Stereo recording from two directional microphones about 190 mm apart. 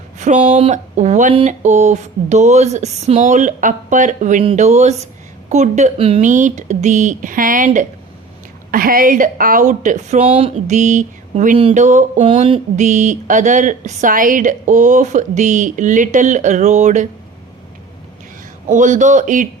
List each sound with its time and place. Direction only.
0.2 s speech: 40° right (ahead or behind)
18.7 s speech: 40° right (ahead or behind)